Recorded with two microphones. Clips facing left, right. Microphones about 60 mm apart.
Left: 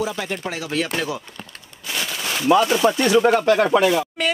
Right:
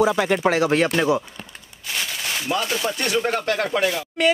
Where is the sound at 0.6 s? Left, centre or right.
Right.